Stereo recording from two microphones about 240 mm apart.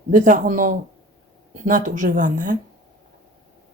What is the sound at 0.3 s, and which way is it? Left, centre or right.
Speech, right.